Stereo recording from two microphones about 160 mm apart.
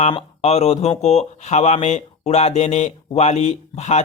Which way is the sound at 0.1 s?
40° left (ahead or behind).